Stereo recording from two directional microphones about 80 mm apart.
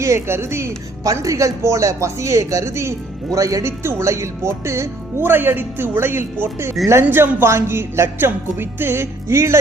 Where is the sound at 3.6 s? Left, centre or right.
Right.